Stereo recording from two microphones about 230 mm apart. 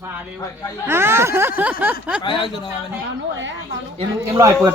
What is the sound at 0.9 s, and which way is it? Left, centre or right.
Speech, centre.